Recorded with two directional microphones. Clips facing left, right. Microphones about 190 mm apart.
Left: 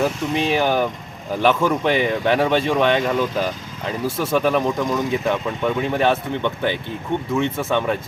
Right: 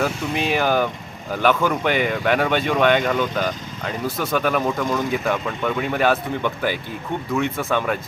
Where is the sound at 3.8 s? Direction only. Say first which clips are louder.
Left 2 dB; 25° left (ahead or behind).